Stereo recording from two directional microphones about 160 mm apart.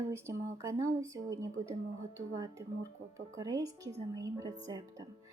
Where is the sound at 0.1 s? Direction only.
15° right (ahead or behind).